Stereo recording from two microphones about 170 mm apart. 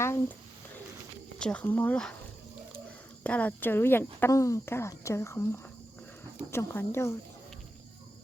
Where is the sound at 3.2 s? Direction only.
10° left (ahead or behind).